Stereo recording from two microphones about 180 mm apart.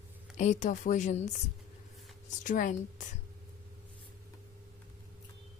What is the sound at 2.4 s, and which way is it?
Speech, 45° left (ahead or behind).